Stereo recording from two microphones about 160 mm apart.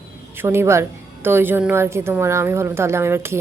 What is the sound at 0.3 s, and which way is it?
A woman's voice, 15° right (ahead or behind).